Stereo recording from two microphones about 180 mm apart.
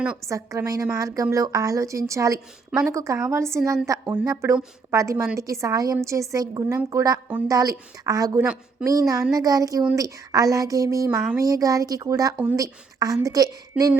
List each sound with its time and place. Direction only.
0.3 s a woman's voice: 15° right (ahead or behind)